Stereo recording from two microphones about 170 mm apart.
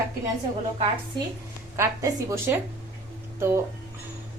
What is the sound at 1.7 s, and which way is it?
A woman's voice, 20° right (ahead or behind).